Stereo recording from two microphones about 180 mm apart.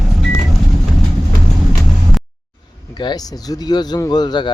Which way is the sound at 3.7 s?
25° left (ahead or behind).